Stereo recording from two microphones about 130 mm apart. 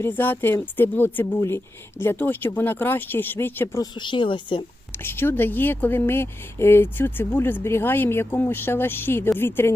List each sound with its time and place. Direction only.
0.0 s speech: 15° left (ahead or behind)
4.0 s speech: 40° left (ahead or behind)
5.0 s speech: 15° left (ahead or behind)